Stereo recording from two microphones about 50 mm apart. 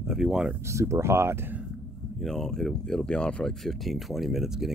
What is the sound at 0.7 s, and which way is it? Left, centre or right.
Speech, right.